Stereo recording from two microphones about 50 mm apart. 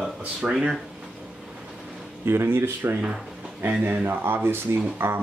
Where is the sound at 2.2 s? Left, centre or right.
Right.